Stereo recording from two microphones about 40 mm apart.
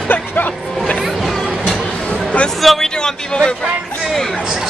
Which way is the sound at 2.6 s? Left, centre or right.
Centre.